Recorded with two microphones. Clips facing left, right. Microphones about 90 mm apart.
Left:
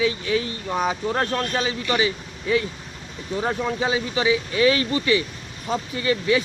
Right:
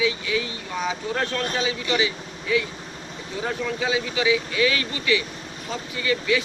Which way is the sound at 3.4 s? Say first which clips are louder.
Left 2 dB; 35° left (ahead or behind).